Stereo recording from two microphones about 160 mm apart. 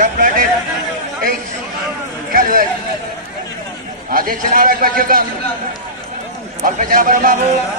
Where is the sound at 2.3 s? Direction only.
60° right (ahead or behind).